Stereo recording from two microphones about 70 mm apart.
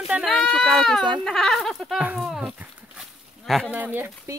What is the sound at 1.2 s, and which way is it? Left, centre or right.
Speech, centre.